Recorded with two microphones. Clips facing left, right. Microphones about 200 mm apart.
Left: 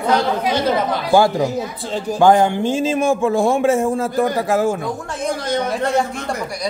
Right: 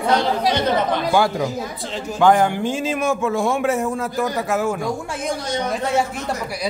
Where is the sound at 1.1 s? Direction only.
25° left (ahead or behind).